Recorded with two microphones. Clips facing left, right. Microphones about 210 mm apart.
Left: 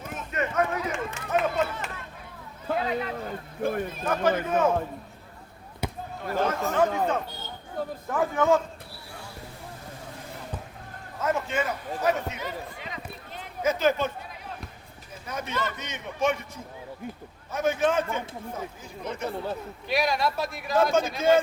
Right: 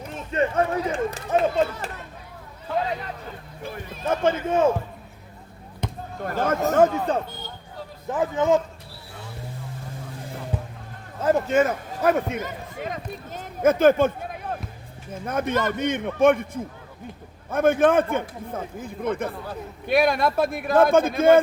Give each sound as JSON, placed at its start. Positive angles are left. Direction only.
{"t": 0.1, "sound": "speech", "side_deg": -30}
{"t": 3.6, "sound": "speech", "side_deg": 50}
{"t": 4.0, "sound": "speech", "side_deg": -25}
{"t": 5.8, "sound": "basketball bounce", "side_deg": 10}
{"t": 6.2, "sound": "a man's voice", "side_deg": -50}
{"t": 8.0, "sound": "speech", "side_deg": -20}
{"t": 10.5, "sound": "a sound", "side_deg": -10}
{"t": 11.2, "sound": "a man's voice", "side_deg": -35}